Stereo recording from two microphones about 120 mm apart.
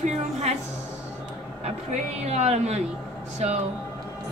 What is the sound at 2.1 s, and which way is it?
Speech, 65° right (ahead or behind).